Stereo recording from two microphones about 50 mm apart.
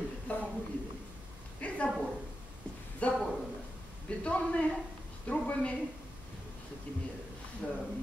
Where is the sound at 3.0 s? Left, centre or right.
Left.